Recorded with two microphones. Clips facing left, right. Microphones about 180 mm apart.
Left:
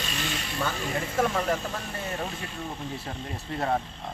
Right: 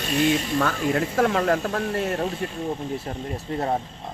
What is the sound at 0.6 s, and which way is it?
Speech, 70° right (ahead or behind).